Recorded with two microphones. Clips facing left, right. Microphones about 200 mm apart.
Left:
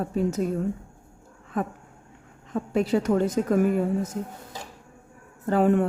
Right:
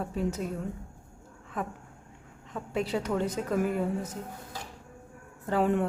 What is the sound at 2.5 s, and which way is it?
A woman's voice, 45° left (ahead or behind).